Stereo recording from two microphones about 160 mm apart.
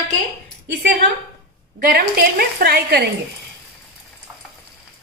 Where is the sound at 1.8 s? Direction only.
70° right (ahead or behind).